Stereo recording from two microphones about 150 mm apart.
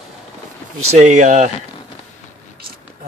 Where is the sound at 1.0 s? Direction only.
55° right (ahead or behind).